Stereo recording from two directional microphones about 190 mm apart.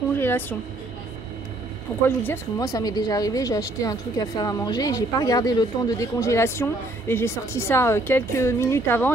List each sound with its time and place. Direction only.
0.1 s speech: 10° left (ahead or behind)
2.0 s speech: 15° left (ahead or behind)